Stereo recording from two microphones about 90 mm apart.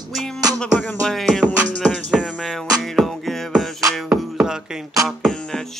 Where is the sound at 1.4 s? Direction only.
15° left (ahead or behind).